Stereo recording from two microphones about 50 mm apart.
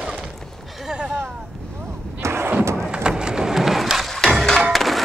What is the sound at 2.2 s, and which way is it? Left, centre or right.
Thump, right.